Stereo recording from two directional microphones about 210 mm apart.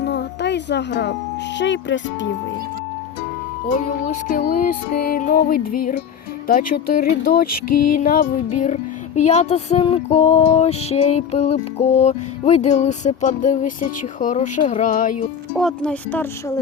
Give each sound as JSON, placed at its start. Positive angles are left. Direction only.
{"t": 0.1, "sound": "music", "side_deg": 55}
{"t": 1.5, "sound": "speech", "side_deg": 60}
{"t": 4.3, "sound": "music", "side_deg": 45}
{"t": 15.5, "sound": "speech", "side_deg": 5}